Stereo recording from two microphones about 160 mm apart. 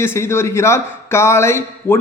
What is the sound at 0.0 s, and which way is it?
A man's voice, 15° left (ahead or behind).